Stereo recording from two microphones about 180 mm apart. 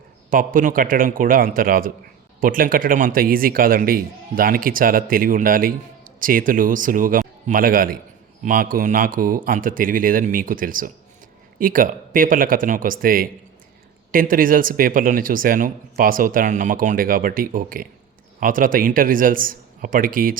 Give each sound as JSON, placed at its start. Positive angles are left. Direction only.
{"t": 0.3, "sound": "a man's voice", "side_deg": -50}